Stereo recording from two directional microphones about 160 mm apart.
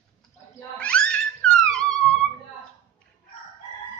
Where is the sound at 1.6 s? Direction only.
5° left (ahead or behind).